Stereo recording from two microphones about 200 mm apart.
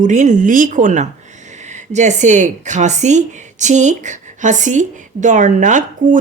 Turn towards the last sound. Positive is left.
turn(degrees=-40)  # may be behind; listen again after turning